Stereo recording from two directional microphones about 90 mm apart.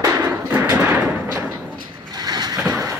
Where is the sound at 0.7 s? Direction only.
15° right (ahead or behind).